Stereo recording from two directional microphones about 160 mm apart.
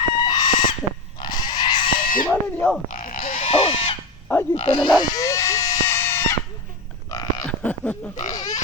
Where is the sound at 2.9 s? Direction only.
55° left (ahead or behind).